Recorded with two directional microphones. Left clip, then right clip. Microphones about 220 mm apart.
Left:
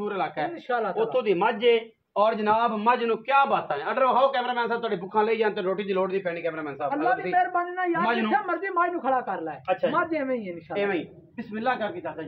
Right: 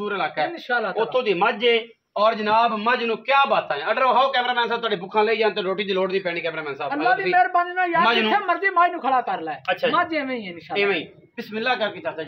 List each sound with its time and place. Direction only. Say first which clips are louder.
0.0 s speech: right 4 dB; 5° right (ahead or behind); by 6.3 s 25° right (ahead or behind)
6.4 s a man's voice: right 2 dB; 40° right (ahead or behind)